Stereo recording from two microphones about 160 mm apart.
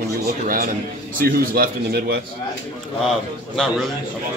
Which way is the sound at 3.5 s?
Centre (ahead or behind).